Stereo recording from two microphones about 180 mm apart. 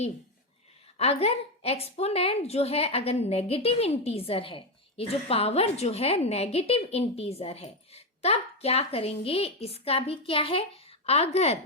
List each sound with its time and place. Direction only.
0.9 s a woman's voice: 35° left (ahead or behind)